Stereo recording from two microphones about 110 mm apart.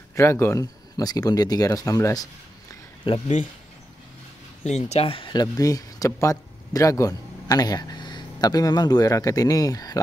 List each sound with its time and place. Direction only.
0.1 s speech: 25° left (ahead or behind)
0.9 s speech: 35° left (ahead or behind)
3.1 s speech: 55° left (ahead or behind)
4.6 s speech: 90° left; by 9.9 s 35° left (ahead or behind)